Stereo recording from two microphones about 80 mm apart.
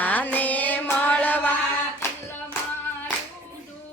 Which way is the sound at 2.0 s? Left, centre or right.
Left.